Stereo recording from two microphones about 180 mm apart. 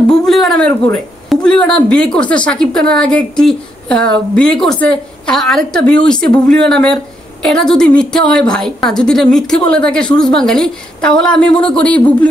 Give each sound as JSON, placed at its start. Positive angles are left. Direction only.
{"t": 0.3, "sound": "a woman's voice", "side_deg": 0}